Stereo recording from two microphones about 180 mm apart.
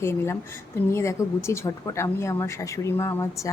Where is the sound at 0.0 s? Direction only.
15° left (ahead or behind).